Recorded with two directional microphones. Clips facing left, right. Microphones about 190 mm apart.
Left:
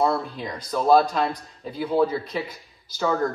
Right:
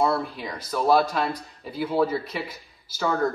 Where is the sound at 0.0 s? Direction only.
5° right (ahead or behind).